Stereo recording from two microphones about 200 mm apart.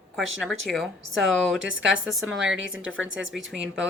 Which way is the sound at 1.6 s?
70° right (ahead or behind).